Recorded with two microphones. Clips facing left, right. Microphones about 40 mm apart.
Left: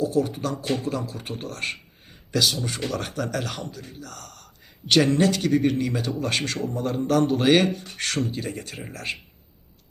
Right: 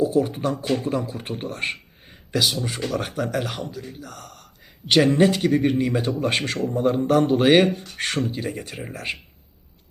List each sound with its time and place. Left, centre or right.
0.0 s a man's voice: centre